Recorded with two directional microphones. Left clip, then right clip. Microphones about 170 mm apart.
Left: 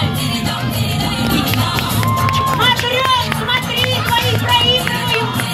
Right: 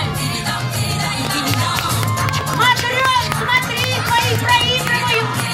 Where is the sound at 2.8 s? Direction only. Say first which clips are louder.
Left 1 dB; 15° left (ahead or behind).